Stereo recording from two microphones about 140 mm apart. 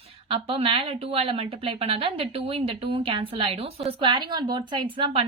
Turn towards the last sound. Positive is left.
turn(degrees=-40)  # may be behind; listen again after turning